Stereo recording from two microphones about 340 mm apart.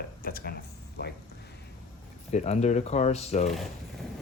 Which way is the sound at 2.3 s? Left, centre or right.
Centre.